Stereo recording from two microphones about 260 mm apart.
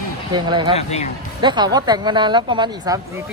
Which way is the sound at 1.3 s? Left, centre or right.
Centre.